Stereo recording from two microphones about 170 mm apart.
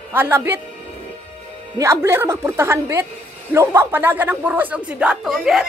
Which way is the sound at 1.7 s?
15° right (ahead or behind).